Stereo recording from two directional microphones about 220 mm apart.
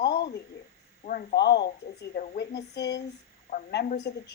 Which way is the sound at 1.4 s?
50° left (ahead or behind).